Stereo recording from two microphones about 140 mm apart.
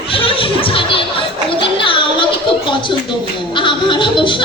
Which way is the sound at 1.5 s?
40° left (ahead or behind).